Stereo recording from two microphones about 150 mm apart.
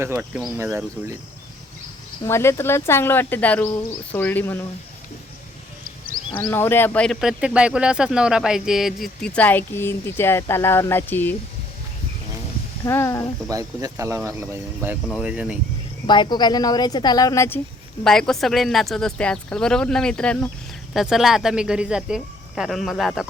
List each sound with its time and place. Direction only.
0.0 s speech: 15° right (ahead or behind)
2.2 s speech: 20° left (ahead or behind)
6.4 s speech: 15° left (ahead or behind)
12.8 s speech: 20° left (ahead or behind)
13.5 s speech: 20° right (ahead or behind)
15.0 s speech: 5° right (ahead or behind)
16.0 s speech: 30° left (ahead or behind)
18.0 s speech: 5° left (ahead or behind)